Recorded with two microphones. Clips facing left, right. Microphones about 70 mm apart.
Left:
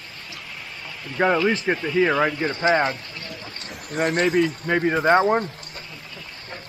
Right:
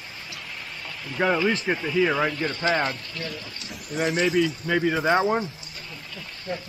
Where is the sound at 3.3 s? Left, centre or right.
Left.